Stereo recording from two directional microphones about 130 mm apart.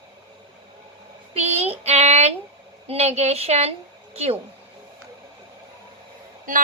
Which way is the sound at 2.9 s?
55° right (ahead or behind).